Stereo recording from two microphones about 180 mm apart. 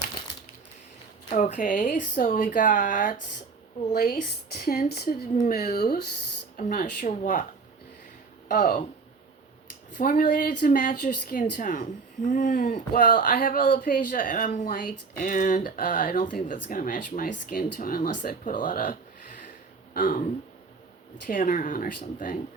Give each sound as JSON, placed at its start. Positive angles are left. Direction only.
{"t": 1.3, "sound": "a woman's voice", "side_deg": 45}
{"t": 6.6, "sound": "a woman's voice", "side_deg": 50}
{"t": 8.4, "sound": "a woman's voice", "side_deg": 50}
{"t": 10.0, "sound": "a woman's voice", "side_deg": 55}